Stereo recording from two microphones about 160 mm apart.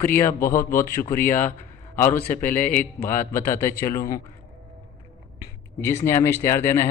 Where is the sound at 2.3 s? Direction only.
10° left (ahead or behind).